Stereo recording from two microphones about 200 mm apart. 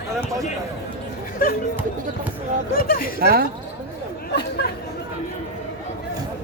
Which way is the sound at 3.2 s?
50° right (ahead or behind).